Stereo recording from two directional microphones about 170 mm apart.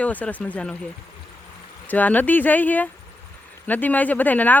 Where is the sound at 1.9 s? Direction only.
10° left (ahead or behind).